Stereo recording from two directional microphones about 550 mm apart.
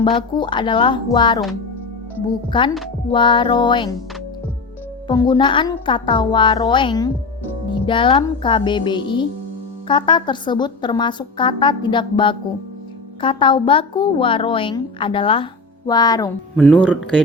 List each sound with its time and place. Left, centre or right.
0.0 s a woman's voice: centre
5.0 s a woman's voice: centre